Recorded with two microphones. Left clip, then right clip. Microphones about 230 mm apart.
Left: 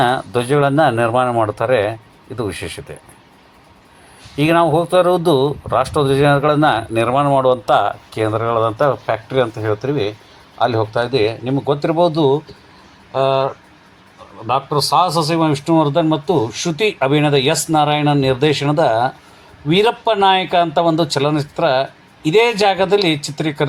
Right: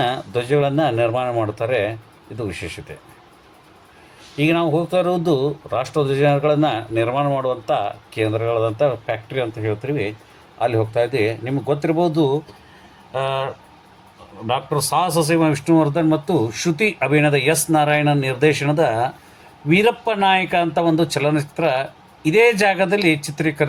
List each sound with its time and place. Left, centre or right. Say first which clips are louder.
0.0 s speech: left 5 dB; centre
4.4 s speech: left 5 dB; centre